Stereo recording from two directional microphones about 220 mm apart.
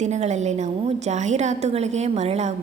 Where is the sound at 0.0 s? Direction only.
30° right (ahead or behind).